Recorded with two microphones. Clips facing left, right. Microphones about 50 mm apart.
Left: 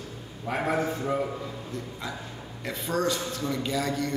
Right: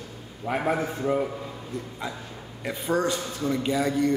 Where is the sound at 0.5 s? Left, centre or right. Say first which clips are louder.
Right 1 dB; centre.